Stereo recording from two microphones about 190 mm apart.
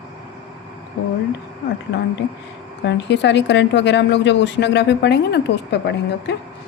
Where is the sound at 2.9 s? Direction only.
65° left (ahead or behind).